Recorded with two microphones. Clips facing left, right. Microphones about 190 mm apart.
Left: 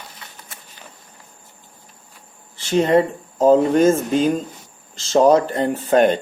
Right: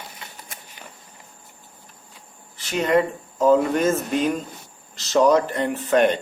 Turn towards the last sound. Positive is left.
turn(degrees=30)  # may be behind; listen again after turning